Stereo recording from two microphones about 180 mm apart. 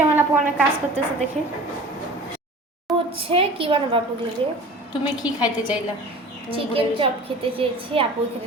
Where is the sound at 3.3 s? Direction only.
30° right (ahead or behind).